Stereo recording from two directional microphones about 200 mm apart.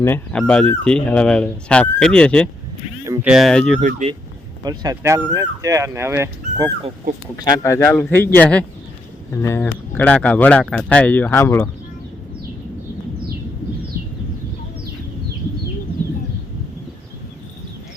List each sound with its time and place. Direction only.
0.0 s speech: 10° left (ahead or behind)
3.1 s speech: 5° right (ahead or behind)
3.8 s speech: 40° right (ahead or behind)
4.6 s speech: 20° right (ahead or behind)
7.3 s speech: 20° left (ahead or behind)